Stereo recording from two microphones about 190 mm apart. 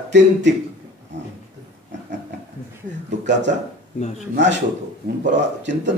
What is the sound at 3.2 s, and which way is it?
A man's voice, 65° right (ahead or behind).